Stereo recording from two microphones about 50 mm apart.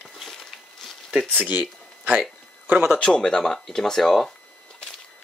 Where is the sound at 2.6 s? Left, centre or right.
Right.